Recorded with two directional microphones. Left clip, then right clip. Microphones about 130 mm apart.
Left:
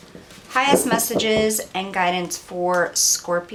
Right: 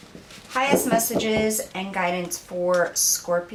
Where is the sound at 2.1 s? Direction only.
20° left (ahead or behind).